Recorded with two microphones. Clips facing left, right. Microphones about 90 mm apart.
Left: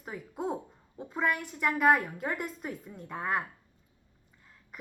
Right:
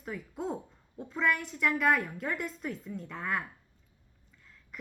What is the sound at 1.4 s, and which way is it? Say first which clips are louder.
Speech: even; 45° left (ahead or behind).